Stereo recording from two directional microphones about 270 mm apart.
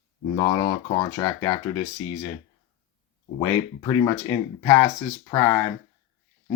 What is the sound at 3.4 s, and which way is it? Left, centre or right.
Speech, centre.